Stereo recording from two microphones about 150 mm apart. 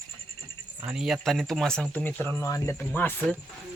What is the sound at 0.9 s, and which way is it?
Speech, centre (ahead or behind).